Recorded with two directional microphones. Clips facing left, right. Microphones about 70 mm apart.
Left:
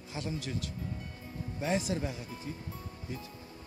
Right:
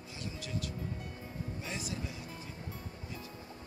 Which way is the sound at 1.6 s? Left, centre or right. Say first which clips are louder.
Left 12 dB; left.